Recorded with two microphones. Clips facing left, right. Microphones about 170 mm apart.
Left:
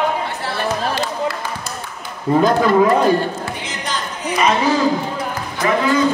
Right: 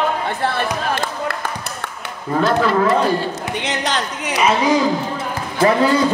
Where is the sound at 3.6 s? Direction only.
75° right (ahead or behind).